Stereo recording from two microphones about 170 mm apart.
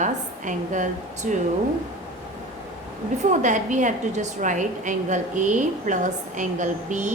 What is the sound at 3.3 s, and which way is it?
A woman's voice, 45° right (ahead or behind).